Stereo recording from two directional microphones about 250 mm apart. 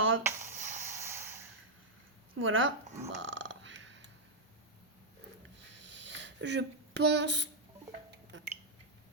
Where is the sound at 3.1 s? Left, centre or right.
Right.